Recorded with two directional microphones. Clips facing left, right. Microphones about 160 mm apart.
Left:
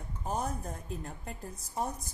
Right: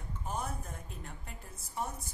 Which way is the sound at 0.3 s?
40° left (ahead or behind).